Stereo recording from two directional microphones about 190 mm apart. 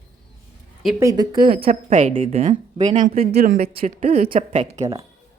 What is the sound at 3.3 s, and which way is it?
Speech, 45° right (ahead or behind).